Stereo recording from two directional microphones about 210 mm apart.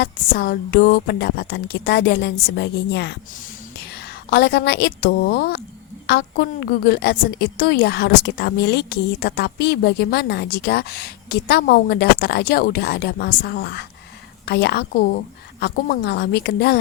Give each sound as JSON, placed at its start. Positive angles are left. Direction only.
{"t": 0.0, "sound": "a woman's voice", "side_deg": 50}